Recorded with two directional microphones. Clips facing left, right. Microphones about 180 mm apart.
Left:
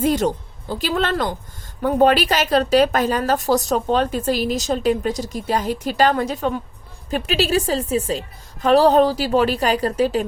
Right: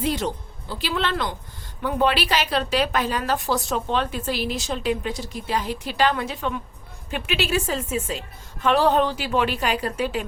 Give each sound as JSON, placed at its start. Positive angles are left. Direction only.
{"t": 0.0, "sound": "a woman's voice", "side_deg": 45}